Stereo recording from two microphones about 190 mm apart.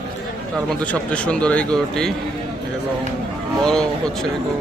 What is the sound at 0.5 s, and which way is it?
Speech, 5° left (ahead or behind).